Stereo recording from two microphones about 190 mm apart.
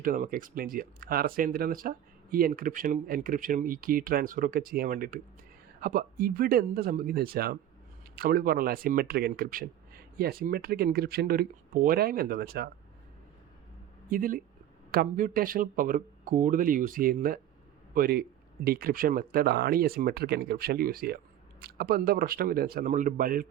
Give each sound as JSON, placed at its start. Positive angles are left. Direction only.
{"t": 0.0, "sound": "speech", "side_deg": -45}
{"t": 14.1, "sound": "speech", "side_deg": -50}